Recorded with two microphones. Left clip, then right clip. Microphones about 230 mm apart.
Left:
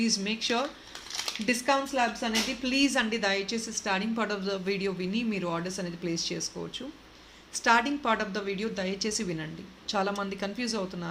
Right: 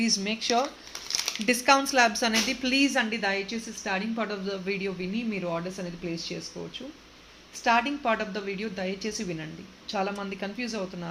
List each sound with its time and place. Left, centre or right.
0.0 s speech: centre
1.5 s speech: centre
2.6 s a woman's voice: centre
7.6 s a woman's voice: centre